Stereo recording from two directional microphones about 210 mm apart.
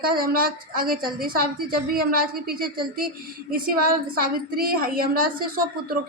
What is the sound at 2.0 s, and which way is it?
A man's voice, 45° right (ahead or behind).